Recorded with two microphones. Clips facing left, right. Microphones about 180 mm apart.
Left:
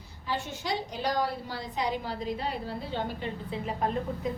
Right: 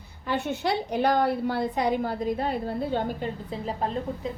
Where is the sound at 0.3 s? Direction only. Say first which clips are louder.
Right 6 dB; 60° right (ahead or behind).